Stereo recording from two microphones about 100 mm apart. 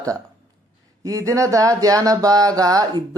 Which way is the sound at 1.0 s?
35° right (ahead or behind).